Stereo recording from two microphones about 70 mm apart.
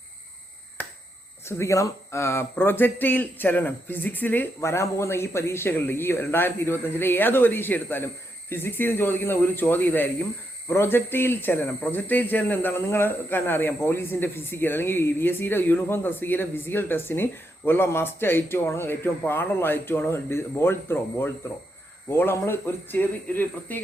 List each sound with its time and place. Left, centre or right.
1.5 s speech: left
4.6 s a man's voice: left